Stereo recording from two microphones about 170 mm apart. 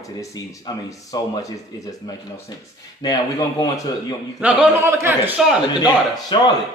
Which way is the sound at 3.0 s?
25° left (ahead or behind).